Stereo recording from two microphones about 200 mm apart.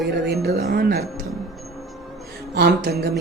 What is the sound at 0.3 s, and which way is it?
Speech, 50° right (ahead or behind).